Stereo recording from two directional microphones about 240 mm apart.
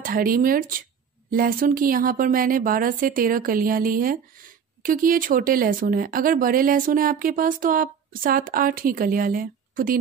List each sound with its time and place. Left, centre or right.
0.0 s speech: right